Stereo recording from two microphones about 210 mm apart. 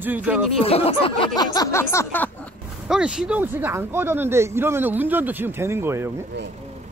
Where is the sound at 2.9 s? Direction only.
5° right (ahead or behind).